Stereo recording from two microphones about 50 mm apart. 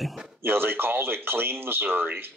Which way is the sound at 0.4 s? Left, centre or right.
Right.